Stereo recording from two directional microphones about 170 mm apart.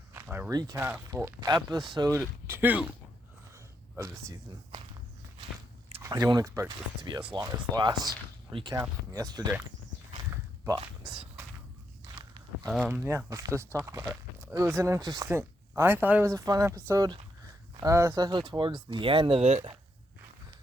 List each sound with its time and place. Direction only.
0.1 s a sound: 15° right (ahead or behind)
0.5 s speech: 20° right (ahead or behind)
6.0 s speech: 20° right (ahead or behind)
12.0 s walk: 25° right (ahead or behind)
12.6 s speech: centre (ahead or behind)
12.9 s speech: 15° right (ahead or behind); by 19.7 s 40° right (ahead or behind)